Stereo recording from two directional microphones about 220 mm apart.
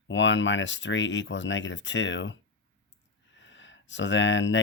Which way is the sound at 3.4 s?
55° left (ahead or behind).